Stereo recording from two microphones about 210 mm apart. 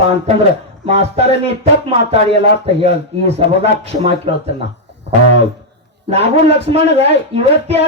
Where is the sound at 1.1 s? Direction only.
30° right (ahead or behind).